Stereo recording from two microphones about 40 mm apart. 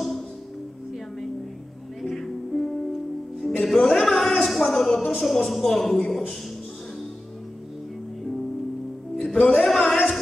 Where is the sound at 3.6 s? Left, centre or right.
Centre.